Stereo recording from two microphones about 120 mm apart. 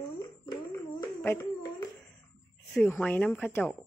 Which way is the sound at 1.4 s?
35° left (ahead or behind).